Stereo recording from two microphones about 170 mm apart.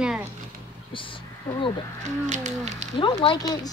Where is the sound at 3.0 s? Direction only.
30° left (ahead or behind).